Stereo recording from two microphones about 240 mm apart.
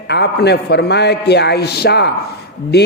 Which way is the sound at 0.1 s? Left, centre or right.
Left.